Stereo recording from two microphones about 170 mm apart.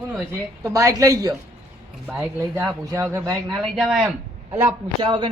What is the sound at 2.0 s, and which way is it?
Speech, 5° right (ahead or behind).